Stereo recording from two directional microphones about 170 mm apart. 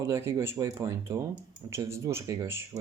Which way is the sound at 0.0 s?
15° right (ahead or behind).